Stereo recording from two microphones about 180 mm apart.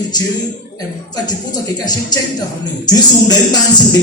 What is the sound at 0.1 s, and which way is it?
Speech, 20° left (ahead or behind).